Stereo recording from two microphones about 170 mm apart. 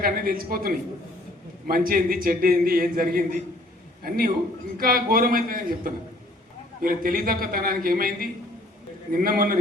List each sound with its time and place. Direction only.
0.0 s a man's voice: 60° right (ahead or behind)